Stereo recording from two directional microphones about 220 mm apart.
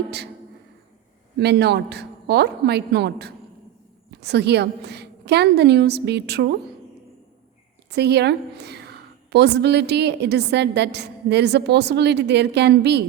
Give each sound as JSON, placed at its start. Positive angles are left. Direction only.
{"t": 1.4, "sound": "a woman's voice", "side_deg": -50}
{"t": 7.9, "sound": "a woman's voice", "side_deg": -50}